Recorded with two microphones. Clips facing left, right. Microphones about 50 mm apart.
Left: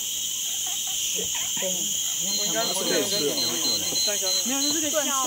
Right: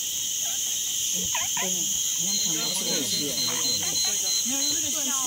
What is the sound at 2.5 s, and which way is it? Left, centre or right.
Speech, left.